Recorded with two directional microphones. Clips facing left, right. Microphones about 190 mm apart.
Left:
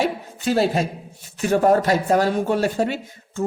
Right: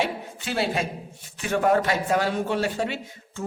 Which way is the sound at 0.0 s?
40° left (ahead or behind).